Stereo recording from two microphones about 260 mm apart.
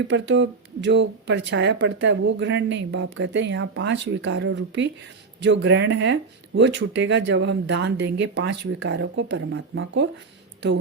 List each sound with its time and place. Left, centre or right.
0.1 s speech: right